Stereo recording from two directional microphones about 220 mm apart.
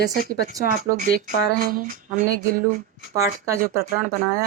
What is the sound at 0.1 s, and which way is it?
Speech, 50° left (ahead or behind).